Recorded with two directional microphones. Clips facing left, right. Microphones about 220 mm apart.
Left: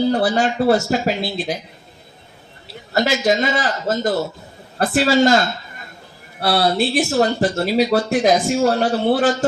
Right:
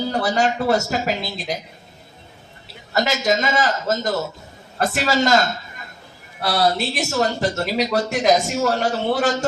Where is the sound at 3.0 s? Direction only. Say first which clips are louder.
Left 3 dB; 45° right (ahead or behind).